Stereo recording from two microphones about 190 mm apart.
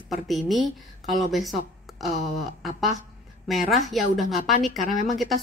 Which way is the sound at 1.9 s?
Centre (ahead or behind).